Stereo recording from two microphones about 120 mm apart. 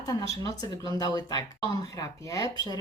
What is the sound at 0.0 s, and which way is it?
Speech, 30° left (ahead or behind).